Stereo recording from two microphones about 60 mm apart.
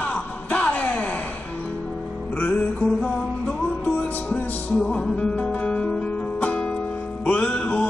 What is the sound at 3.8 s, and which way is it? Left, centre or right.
Music, left.